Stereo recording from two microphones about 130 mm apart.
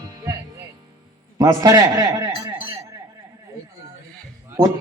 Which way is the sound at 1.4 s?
25° right (ahead or behind).